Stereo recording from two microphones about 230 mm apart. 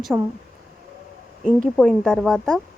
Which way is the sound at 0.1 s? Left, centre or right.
Centre.